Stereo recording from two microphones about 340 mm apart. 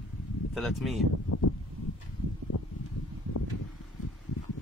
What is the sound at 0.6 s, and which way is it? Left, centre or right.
Speech, centre.